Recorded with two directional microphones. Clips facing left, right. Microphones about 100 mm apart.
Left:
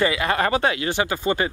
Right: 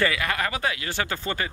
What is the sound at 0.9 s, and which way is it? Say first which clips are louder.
Speech: left 6 dB; 15° left (ahead or behind).